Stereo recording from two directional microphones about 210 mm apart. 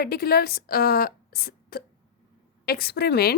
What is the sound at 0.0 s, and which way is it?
A woman's voice, 45° left (ahead or behind).